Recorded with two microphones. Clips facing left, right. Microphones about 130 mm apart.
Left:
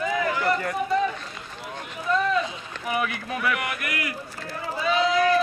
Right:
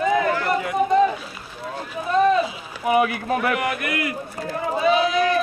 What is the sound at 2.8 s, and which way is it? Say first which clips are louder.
Speech: right 8 dB; 25° right (ahead or behind).